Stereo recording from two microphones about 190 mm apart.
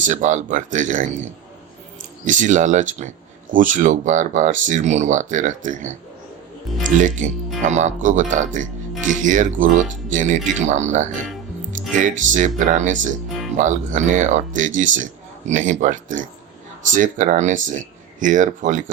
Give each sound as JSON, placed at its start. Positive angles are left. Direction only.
{"t": 0.0, "sound": "speech", "side_deg": -40}
{"t": 2.2, "sound": "speech", "side_deg": -40}